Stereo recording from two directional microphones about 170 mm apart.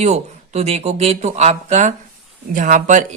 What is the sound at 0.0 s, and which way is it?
Speech, 40° right (ahead or behind).